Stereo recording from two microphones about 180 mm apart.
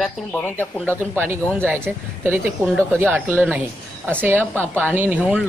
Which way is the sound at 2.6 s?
Centre (ahead or behind).